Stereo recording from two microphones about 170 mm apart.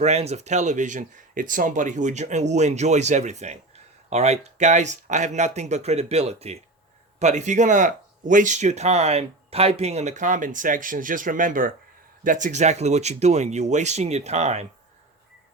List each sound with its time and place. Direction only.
0.0 s speech: 40° right (ahead or behind)